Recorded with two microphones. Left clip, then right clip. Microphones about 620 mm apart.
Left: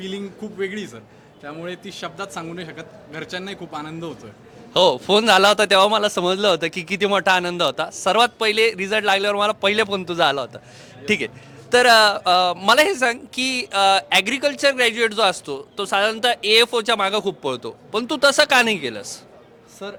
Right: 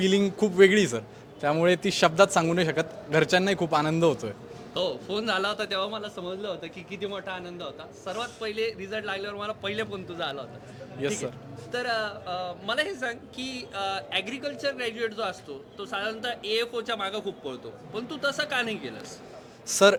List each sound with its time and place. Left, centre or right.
0.0 s a man's voice: right
4.7 s speech: left
11.0 s speech: right
11.7 s speech: left
19.7 s speech: right